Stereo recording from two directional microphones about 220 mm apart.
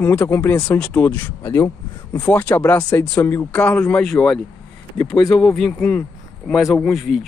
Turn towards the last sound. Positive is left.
turn(degrees=0)  # may be behind; listen again after turning